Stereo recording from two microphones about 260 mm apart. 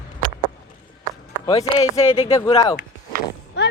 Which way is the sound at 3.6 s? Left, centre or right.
Left.